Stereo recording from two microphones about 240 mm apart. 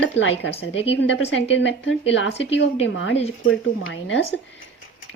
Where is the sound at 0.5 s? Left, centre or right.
Left.